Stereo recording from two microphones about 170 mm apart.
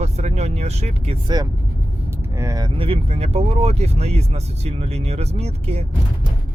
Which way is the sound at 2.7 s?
35° right (ahead or behind).